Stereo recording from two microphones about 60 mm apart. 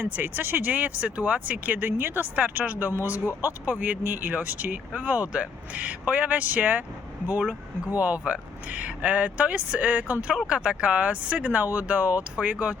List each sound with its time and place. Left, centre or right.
0.0 s speech: right
2.2 s speech: right
7.9 s speech: right